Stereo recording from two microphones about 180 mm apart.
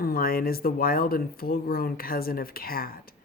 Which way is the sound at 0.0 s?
55° left (ahead or behind).